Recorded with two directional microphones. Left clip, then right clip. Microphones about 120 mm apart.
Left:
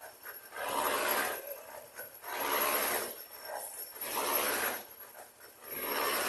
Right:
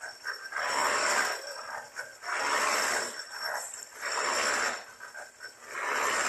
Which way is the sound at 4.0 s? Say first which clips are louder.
Right 4 dB; 20° left (ahead or behind).